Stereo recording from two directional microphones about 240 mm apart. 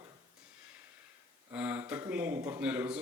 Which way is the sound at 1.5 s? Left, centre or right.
Centre.